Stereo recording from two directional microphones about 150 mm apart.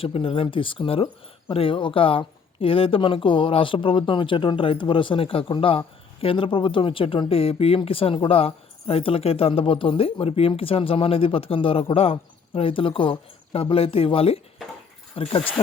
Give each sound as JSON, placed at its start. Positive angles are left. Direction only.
{"t": 0.0, "sound": "speech", "side_deg": 35}